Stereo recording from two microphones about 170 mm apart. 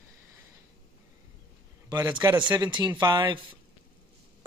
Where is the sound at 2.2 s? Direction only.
25° right (ahead or behind).